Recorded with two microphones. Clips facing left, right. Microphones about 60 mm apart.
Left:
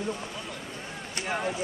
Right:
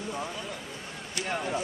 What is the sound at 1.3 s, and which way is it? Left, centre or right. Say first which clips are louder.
Speech: left 2 dB; centre.